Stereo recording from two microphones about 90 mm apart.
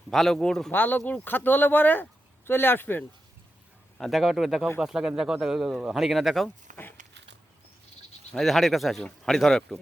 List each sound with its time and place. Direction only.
0.1 s speech: centre (ahead or behind)
0.7 s speech: 20° left (ahead or behind)
3.9 s speech: centre (ahead or behind)
8.3 s speech: centre (ahead or behind)